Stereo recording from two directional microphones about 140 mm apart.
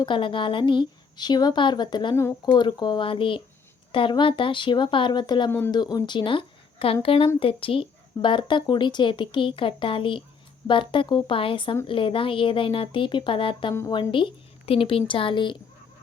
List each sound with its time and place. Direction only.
0.0 s speech: 35° left (ahead or behind)
2.1 s speech: 20° left (ahead or behind)
2.6 s speech: 30° left (ahead or behind)
5.5 s speech: 15° left (ahead or behind)
5.7 s speech: 30° left (ahead or behind)